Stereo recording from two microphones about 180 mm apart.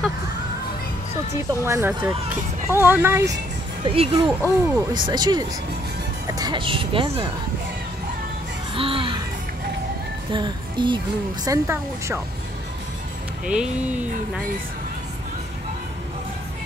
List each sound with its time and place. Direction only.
1.6 s speech: 15° right (ahead or behind)
3.8 s speech: 30° right (ahead or behind)
4.5 s speech: 20° right (ahead or behind)
8.7 s music: 30° right (ahead or behind)
10.3 s speech: 25° right (ahead or behind)
13.5 s speech: 5° right (ahead or behind)